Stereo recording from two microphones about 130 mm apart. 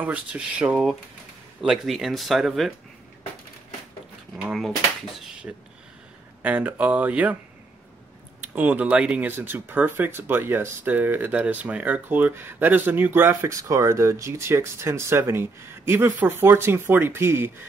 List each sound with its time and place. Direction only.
0.0 s speech: 10° right (ahead or behind)
5.2 s a sound: 5° right (ahead or behind)
6.4 s speech: 10° right (ahead or behind)
8.5 s speech: 10° right (ahead or behind)